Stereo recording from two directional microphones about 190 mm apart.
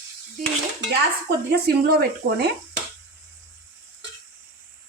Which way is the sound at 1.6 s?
55° right (ahead or behind).